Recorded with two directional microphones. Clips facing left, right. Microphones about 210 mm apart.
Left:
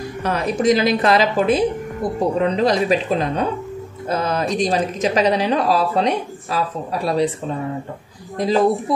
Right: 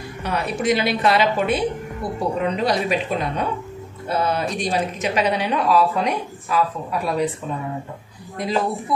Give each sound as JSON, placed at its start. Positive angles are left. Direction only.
{"t": 0.2, "sound": "speech", "side_deg": 90}
{"t": 0.7, "sound": "speech", "side_deg": 40}
{"t": 4.1, "sound": "speech", "side_deg": 90}
{"t": 4.6, "sound": "speech", "side_deg": 35}
{"t": 8.4, "sound": "speech", "side_deg": 35}